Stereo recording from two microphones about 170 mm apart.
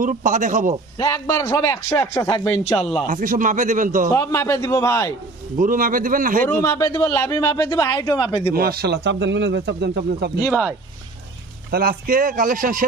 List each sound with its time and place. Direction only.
0.0 s speech: 50° right (ahead or behind)
0.9 s a man's voice: 20° left (ahead or behind)
3.1 s speech: 50° right (ahead or behind)
4.1 s a man's voice: 15° left (ahead or behind)
5.5 s speech: 55° right (ahead or behind)
6.4 s a man's voice: 15° left (ahead or behind); by 8.4 s 30° left (ahead or behind)
8.5 s speech: 65° right (ahead or behind)
10.4 s speech: centre (ahead or behind)
11.7 s speech: 60° right (ahead or behind)